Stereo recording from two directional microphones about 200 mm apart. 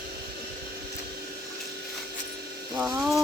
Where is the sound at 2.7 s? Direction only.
5° right (ahead or behind).